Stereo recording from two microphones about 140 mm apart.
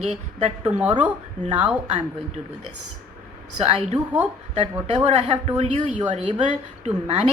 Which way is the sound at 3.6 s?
45° right (ahead or behind).